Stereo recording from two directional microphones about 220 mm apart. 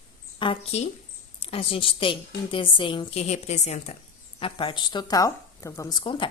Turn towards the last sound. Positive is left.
turn(degrees=20)  # may be behind; listen again after turning